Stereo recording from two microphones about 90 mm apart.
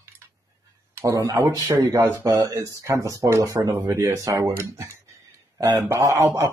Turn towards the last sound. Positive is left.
turn(degrees=-35)  # may be behind; listen again after turning